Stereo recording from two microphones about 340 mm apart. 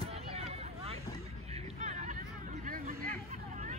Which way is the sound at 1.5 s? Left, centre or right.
Centre.